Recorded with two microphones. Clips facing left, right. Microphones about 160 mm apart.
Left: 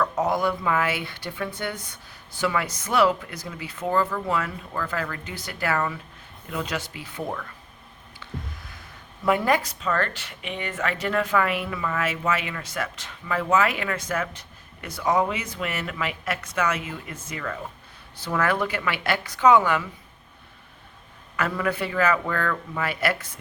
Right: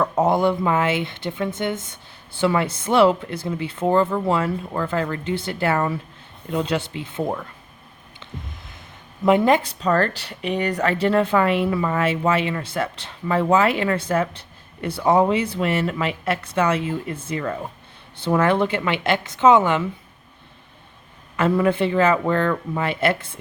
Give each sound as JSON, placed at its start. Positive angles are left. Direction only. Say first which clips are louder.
{"t": 0.0, "sound": "speech", "louder": "right 5 dB", "side_deg": -25}
{"t": 8.2, "sound": "a sound", "louder": "even", "side_deg": -20}
{"t": 9.2, "sound": "speech", "louder": "right 5 dB", "side_deg": -20}
{"t": 21.3, "sound": "speech", "louder": "right 7 dB", "side_deg": -25}